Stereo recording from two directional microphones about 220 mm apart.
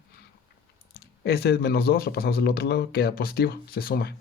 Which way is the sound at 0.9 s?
45° left (ahead or behind).